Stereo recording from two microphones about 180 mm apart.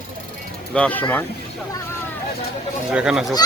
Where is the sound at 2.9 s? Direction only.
5° right (ahead or behind).